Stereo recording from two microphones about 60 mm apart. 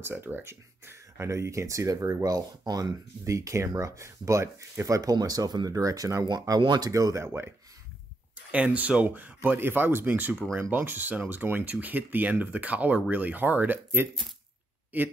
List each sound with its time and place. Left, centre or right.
0.0 s speech: right
4.8 s speech: right
7.2 s speech: right
8.5 s speech: right